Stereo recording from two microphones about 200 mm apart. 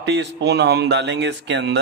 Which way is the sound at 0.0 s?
60° right (ahead or behind).